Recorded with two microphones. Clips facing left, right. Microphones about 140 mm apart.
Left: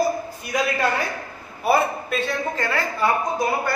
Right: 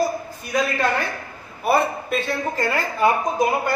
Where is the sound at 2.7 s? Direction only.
20° right (ahead or behind).